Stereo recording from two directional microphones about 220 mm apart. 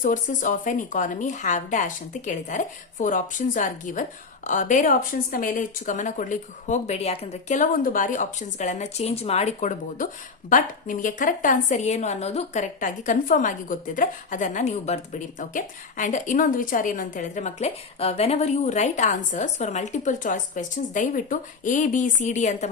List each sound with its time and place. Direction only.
0.0 s a woman's voice: 35° left (ahead or behind)